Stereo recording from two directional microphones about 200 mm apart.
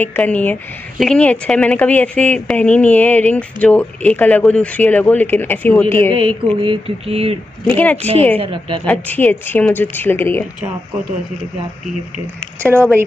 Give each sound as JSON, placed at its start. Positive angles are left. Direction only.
{"t": 0.0, "sound": "a woman's voice", "side_deg": 10}
{"t": 6.1, "sound": "speech", "side_deg": -25}
{"t": 7.6, "sound": "a woman's voice", "side_deg": 5}
{"t": 8.4, "sound": "speech", "side_deg": -25}
{"t": 8.8, "sound": "a woman's voice", "side_deg": 10}